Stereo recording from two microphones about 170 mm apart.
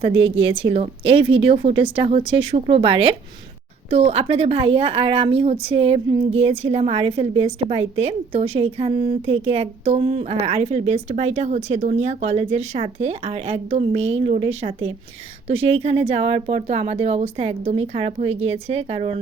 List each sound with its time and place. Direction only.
0.4 s a woman's voice: 30° right (ahead or behind)